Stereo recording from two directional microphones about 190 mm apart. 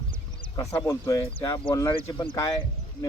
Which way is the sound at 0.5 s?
20° left (ahead or behind).